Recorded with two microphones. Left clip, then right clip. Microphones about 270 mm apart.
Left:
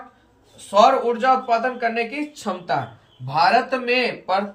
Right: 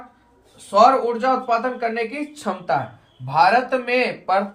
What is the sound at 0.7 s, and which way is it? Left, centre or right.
Speech, centre.